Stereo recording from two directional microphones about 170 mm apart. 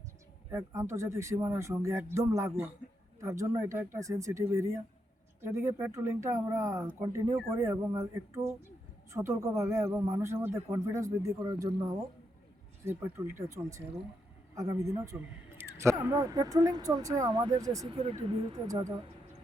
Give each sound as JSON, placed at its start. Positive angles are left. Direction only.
{"t": 0.5, "sound": "a man's voice", "side_deg": -15}
{"t": 17.9, "sound": "speech", "side_deg": -30}
{"t": 18.7, "sound": "speech", "side_deg": -20}